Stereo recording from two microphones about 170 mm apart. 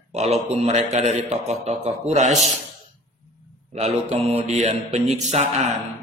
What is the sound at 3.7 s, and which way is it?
A man's voice, 35° right (ahead or behind).